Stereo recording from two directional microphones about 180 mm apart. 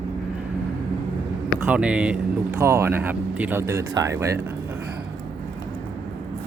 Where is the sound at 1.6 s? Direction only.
5° right (ahead or behind).